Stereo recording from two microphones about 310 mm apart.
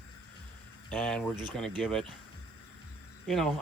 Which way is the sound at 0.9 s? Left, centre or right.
Centre.